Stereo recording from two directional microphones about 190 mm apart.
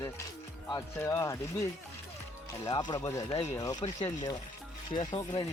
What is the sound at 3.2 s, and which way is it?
Speech, 30° left (ahead or behind).